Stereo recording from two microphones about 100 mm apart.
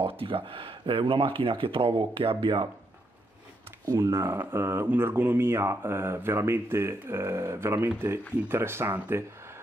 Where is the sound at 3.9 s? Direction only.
30° right (ahead or behind).